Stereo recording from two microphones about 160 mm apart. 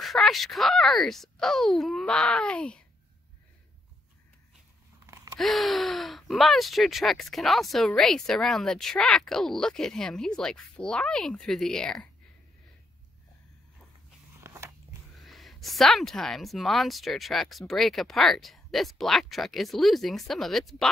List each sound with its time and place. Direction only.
0.0 s speech: centre (ahead or behind)
5.0 s a sound: 20° right (ahead or behind)
5.4 s speech: centre (ahead or behind)
14.4 s biting: 15° right (ahead or behind)
15.1 s speech: centre (ahead or behind)